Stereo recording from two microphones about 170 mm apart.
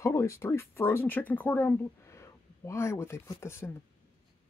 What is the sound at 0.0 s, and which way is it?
Speech, 15° left (ahead or behind).